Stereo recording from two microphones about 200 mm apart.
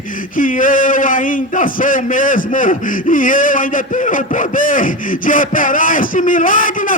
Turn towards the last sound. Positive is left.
turn(degrees=40)  # may be behind; listen again after turning